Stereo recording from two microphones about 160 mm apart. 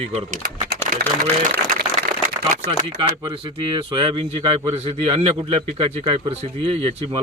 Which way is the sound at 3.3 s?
30° right (ahead or behind).